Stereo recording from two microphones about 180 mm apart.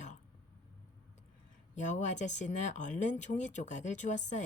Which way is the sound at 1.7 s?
40° left (ahead or behind).